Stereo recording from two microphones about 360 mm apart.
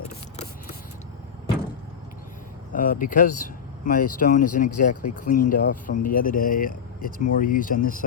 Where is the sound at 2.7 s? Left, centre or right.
Left.